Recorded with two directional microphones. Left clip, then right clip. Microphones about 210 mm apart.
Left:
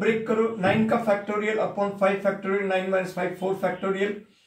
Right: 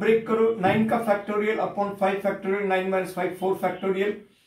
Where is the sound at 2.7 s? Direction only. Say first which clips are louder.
Even; 20° right (ahead or behind).